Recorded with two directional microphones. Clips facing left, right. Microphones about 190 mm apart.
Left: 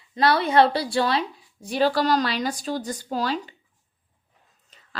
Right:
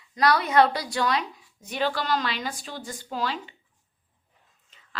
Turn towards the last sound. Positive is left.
turn(degrees=40)  # may be behind; listen again after turning